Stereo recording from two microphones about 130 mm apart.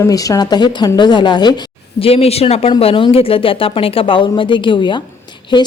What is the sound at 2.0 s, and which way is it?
A woman's voice, 50° left (ahead or behind).